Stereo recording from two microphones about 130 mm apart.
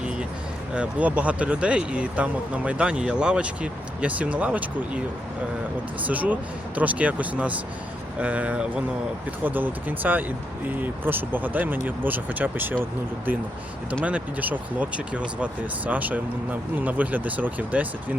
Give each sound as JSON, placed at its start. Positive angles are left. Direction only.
{"t": 0.7, "sound": "speech", "side_deg": -10}
{"t": 6.1, "sound": "speech", "side_deg": -10}
{"t": 14.0, "sound": "speech", "side_deg": -10}